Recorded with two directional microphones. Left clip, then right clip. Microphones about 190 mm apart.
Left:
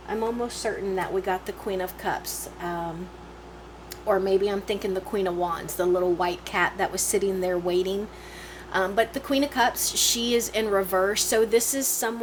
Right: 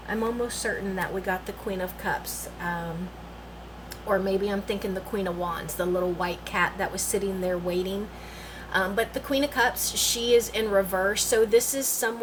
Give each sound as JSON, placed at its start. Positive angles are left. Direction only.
{"t": 0.4, "sound": "a woman's voice", "side_deg": 35}
{"t": 4.1, "sound": "a woman's voice", "side_deg": 45}